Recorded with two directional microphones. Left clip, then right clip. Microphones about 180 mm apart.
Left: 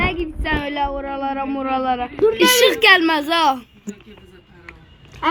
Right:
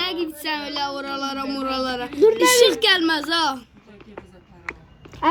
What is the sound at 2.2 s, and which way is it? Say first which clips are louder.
Speech: right 1 dB; 55° right (ahead or behind).